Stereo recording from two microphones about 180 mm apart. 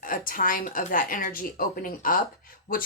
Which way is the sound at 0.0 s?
50° left (ahead or behind).